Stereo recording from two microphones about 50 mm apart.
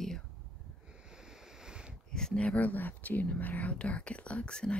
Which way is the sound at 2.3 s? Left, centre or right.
Left.